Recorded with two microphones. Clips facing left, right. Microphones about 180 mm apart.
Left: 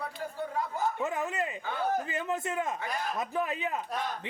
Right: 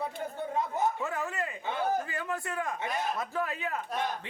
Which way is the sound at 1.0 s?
20° left (ahead or behind).